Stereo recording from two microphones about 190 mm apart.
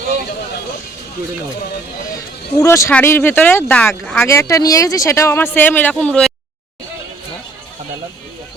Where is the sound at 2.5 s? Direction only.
15° left (ahead or behind).